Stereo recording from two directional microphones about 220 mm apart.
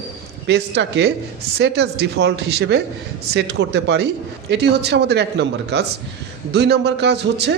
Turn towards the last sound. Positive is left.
turn(degrees=-50)  # may be behind; listen again after turning